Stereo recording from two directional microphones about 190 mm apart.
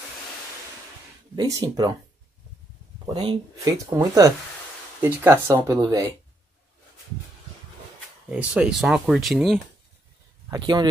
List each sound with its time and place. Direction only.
1.3 s speech: 20° right (ahead or behind)
3.1 s speech: 30° right (ahead or behind)
3.5 s speech: 15° right (ahead or behind)
8.3 s speech: 5° right (ahead or behind)
10.5 s speech: 25° right (ahead or behind)